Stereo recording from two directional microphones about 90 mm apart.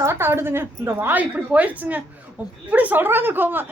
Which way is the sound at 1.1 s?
15° right (ahead or behind).